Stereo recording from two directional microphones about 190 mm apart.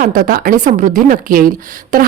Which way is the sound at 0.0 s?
45° right (ahead or behind).